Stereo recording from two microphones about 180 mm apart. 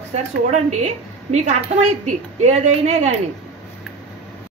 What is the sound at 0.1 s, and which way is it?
A woman's voice, 40° right (ahead or behind).